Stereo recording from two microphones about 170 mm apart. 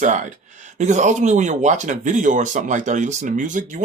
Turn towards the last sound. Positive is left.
turn(degrees=-50)  # may be behind; listen again after turning